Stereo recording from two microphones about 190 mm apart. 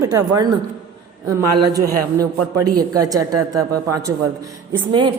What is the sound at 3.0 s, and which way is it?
Speech, 20° right (ahead or behind).